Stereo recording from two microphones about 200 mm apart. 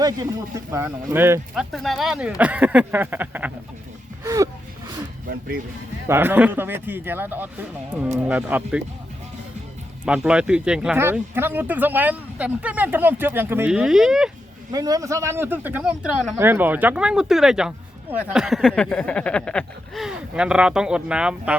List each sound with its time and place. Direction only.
0.0 s speech: 15° right (ahead or behind)
1.7 s speech: centre (ahead or behind)
4.2 s a sound: 15° right (ahead or behind)
6.1 s speech: 10° right (ahead or behind)
10.1 s speech: 5° right (ahead or behind)
14.7 s speech: 20° right (ahead or behind)